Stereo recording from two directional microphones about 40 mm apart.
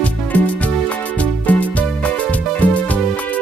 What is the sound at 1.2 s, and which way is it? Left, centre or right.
Music, left.